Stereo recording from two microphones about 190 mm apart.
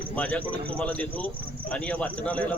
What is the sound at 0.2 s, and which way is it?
Speech, 5° left (ahead or behind).